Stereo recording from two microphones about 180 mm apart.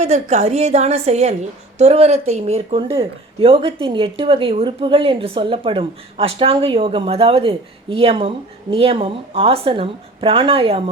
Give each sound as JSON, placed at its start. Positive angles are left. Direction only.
{"t": 0.0, "sound": "a woman's voice", "side_deg": -35}